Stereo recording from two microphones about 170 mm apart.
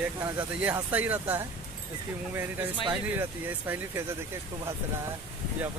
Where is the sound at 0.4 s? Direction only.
10° right (ahead or behind).